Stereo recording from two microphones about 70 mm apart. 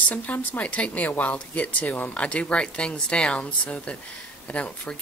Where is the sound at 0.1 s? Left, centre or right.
Left.